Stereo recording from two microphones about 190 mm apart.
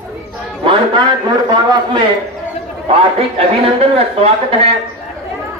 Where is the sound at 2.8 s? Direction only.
30° right (ahead or behind).